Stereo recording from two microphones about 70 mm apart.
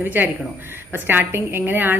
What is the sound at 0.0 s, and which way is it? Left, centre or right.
A woman's voice, right.